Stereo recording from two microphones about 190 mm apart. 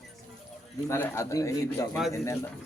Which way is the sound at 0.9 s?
15° left (ahead or behind).